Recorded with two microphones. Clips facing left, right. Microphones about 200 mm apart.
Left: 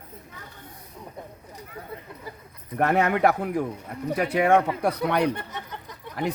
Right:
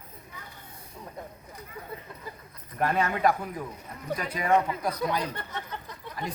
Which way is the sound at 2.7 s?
70° left (ahead or behind).